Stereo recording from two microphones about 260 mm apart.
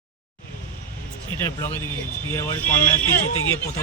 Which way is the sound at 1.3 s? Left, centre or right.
Centre.